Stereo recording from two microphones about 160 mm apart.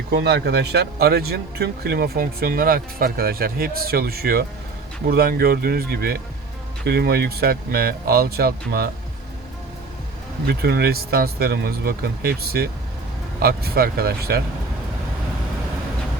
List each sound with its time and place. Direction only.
0.1 s a man's voice: 90° right; by 8.9 s 75° right (ahead or behind)
10.4 s a man's voice: 80° right